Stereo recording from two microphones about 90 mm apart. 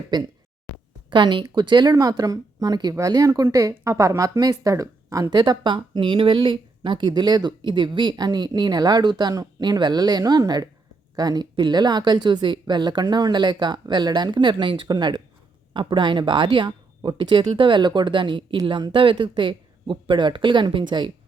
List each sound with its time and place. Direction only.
0.1 s speech: 50° right (ahead or behind)
1.1 s speech: 60° right (ahead or behind); by 4.7 s 45° right (ahead or behind)
4.7 s speech: 35° right (ahead or behind)
5.3 s speech: 50° right (ahead or behind)